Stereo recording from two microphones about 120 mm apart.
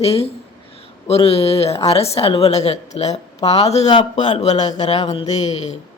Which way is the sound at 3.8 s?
40° left (ahead or behind).